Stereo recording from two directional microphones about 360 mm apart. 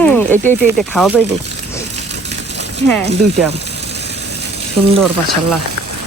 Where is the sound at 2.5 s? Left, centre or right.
Right.